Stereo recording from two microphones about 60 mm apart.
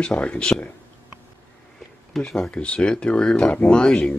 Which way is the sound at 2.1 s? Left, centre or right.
Centre.